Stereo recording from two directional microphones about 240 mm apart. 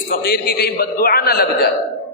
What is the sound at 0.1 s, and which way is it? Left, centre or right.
A man's voice, left.